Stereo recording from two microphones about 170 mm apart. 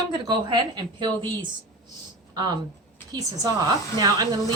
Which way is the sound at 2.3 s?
25° right (ahead or behind).